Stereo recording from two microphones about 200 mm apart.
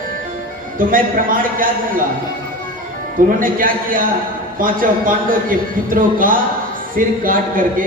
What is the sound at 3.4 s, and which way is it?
A man's voice, 45° right (ahead or behind).